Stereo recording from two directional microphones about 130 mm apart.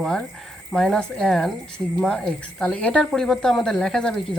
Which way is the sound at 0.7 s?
5° left (ahead or behind).